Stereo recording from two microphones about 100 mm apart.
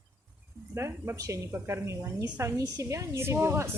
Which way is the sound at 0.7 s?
25° right (ahead or behind).